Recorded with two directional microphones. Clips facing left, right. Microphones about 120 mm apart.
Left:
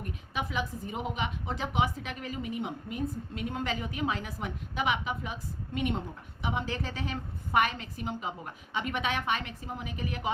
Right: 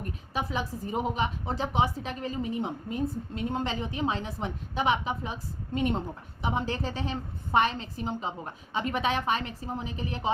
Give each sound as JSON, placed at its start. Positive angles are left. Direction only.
{"t": 0.0, "sound": "a woman's voice", "side_deg": -35}